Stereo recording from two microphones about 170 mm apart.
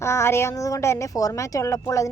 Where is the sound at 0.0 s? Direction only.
15° left (ahead or behind).